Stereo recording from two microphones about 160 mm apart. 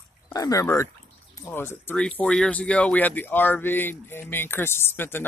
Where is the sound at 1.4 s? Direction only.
15° left (ahead or behind).